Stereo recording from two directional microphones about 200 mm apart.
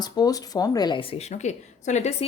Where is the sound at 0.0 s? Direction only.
20° left (ahead or behind).